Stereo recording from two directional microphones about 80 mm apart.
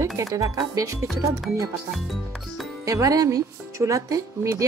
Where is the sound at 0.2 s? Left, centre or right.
Right.